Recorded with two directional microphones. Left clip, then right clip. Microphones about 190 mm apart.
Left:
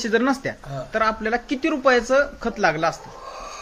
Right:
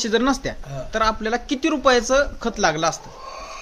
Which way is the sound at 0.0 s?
20° right (ahead or behind).